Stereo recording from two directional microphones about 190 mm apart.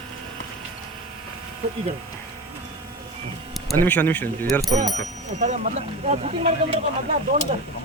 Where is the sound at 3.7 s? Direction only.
10° left (ahead or behind).